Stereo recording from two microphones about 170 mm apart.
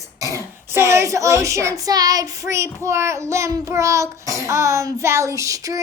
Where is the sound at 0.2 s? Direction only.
20° right (ahead or behind).